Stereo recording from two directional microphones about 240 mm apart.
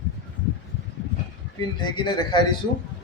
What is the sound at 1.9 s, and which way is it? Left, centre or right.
Speech, centre.